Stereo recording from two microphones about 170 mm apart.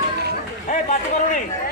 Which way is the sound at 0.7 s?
45° left (ahead or behind).